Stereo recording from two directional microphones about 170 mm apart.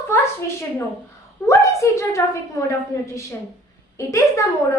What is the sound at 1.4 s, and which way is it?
Speech, 20° left (ahead or behind).